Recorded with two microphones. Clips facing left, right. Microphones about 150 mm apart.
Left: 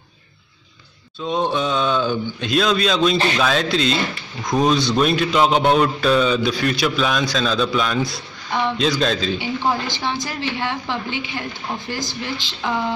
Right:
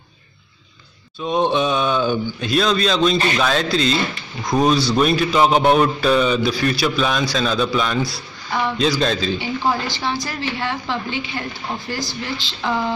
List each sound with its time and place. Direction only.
1.2 s speech: 20° right (ahead or behind)
2.5 s a man's voice: centre (ahead or behind)
9.4 s a woman's voice: 20° left (ahead or behind)